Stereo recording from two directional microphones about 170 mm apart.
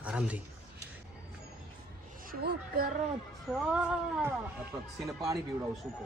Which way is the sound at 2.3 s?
60° right (ahead or behind).